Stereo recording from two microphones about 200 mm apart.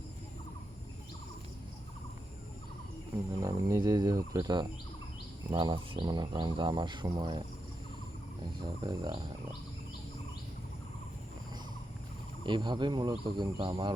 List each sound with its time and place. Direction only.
3.4 s speech: 15° right (ahead or behind)
8.6 s speech: 25° right (ahead or behind)
12.5 s speech: 25° right (ahead or behind)